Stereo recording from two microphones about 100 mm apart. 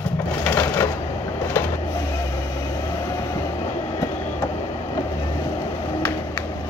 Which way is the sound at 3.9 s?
30° left (ahead or behind).